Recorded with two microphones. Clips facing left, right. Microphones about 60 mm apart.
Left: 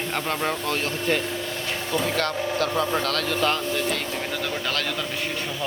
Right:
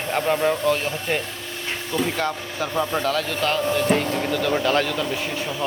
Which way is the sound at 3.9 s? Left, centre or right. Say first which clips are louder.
Right 8 dB; right.